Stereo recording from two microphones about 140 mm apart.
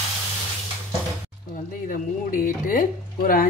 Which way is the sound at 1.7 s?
75° left (ahead or behind).